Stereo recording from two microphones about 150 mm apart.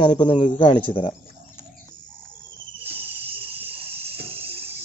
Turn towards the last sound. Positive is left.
turn(degrees=-40)  # may be behind; listen again after turning